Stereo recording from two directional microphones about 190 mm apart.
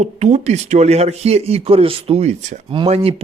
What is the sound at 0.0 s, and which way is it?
Speech, 35° right (ahead or behind).